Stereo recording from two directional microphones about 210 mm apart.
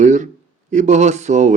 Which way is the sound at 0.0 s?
35° right (ahead or behind).